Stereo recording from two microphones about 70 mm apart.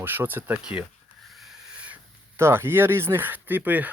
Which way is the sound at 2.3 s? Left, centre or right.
Right.